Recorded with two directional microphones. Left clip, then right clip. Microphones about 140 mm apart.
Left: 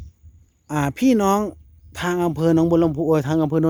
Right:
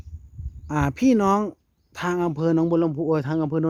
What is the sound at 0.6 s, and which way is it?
Speech, centre (ahead or behind).